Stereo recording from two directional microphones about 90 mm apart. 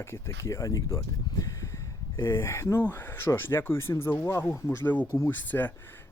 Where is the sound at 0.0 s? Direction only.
30° left (ahead or behind).